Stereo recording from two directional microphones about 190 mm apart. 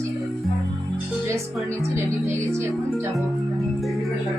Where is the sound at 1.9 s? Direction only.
15° right (ahead or behind).